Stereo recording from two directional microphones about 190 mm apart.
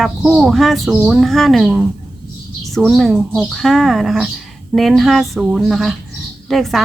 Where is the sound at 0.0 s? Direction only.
Centre (ahead or behind).